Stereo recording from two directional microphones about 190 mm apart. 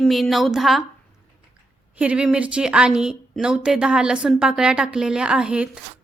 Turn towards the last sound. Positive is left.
turn(degrees=-5)  # may be behind; listen again after turning